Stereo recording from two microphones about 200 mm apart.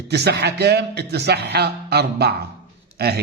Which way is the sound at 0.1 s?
55° right (ahead or behind).